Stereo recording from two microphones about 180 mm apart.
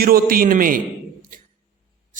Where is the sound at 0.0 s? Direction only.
55° right (ahead or behind).